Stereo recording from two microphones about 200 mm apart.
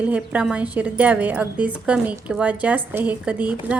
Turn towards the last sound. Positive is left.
turn(degrees=-5)  # may be behind; listen again after turning